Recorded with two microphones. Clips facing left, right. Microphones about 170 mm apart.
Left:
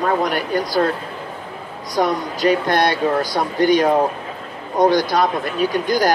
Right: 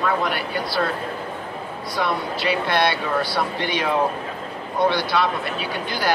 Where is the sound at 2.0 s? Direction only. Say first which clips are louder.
Left 6 dB; 40° left (ahead or behind).